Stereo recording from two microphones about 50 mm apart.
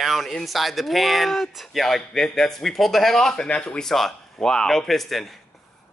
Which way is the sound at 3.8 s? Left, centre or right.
Centre.